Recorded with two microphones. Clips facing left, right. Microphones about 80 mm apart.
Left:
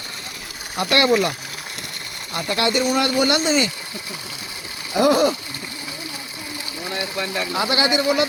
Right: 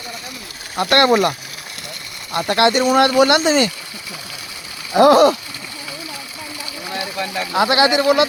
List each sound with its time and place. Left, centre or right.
0.9 s speech: right
2.3 s speech: right
4.9 s speech: right
7.5 s speech: right